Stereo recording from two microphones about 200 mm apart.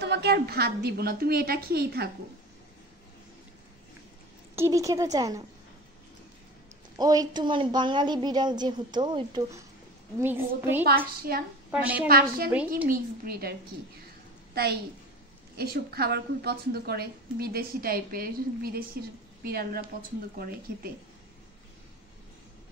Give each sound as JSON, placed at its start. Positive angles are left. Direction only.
{"t": 0.0, "sound": "a woman's voice", "side_deg": -55}
{"t": 4.6, "sound": "a woman's voice", "side_deg": -15}
{"t": 7.0, "sound": "a woman's voice", "side_deg": -20}
{"t": 10.2, "sound": "a woman's voice", "side_deg": -10}
{"t": 11.3, "sound": "a woman's voice", "side_deg": -50}
{"t": 11.7, "sound": "a woman's voice", "side_deg": -5}
{"t": 12.1, "sound": "a woman's voice", "side_deg": -50}
{"t": 12.4, "sound": "a woman's voice", "side_deg": -10}
{"t": 12.8, "sound": "a woman's voice", "side_deg": -45}